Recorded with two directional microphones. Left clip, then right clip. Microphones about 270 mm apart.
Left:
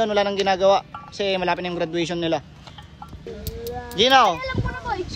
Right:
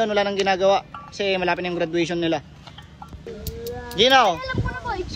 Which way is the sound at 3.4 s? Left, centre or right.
Centre.